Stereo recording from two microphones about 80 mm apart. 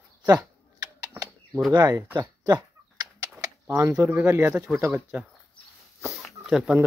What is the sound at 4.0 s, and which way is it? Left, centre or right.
Speech, right.